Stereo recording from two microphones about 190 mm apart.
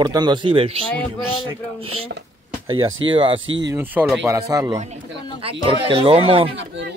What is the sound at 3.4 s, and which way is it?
Speech, 80° right.